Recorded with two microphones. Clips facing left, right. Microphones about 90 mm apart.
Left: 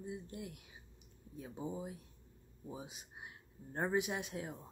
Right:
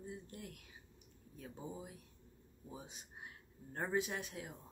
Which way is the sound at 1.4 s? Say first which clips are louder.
Left 5 dB; 25° left (ahead or behind).